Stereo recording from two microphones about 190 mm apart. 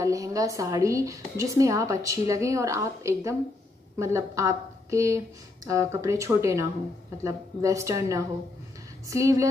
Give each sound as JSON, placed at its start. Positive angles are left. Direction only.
{"t": 0.0, "sound": "a woman's voice", "side_deg": -15}